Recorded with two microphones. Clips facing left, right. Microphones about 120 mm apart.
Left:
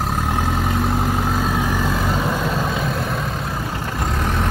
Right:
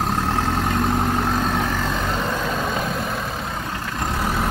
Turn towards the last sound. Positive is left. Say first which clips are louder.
# left 1 dB
turn(degrees=-5)  # may be behind; listen again after turning